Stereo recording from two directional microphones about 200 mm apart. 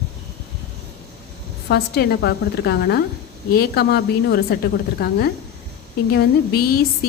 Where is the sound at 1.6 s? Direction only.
55° left (ahead or behind).